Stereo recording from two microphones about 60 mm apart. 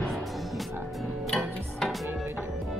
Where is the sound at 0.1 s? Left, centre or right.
Centre.